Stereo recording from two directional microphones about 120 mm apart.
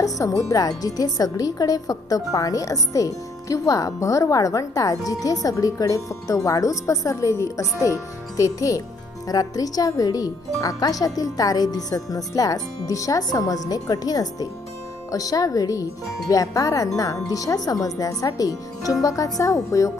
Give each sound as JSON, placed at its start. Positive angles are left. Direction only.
{"t": 0.0, "sound": "speech", "side_deg": 25}